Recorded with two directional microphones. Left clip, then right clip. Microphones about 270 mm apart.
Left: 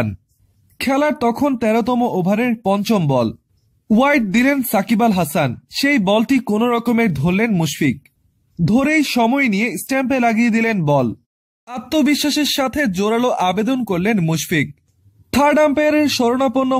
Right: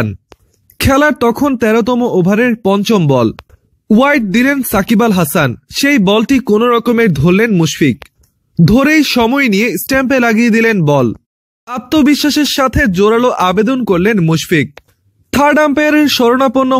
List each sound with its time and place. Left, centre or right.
0.7 s speech: centre